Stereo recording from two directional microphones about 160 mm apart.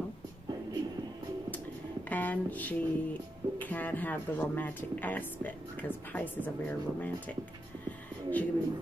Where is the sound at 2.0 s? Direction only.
10° left (ahead or behind).